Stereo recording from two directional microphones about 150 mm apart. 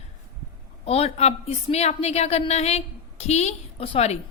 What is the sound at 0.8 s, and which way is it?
A woman's voice, 45° left (ahead or behind).